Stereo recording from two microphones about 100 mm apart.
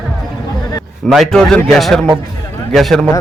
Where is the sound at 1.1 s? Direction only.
5° left (ahead or behind).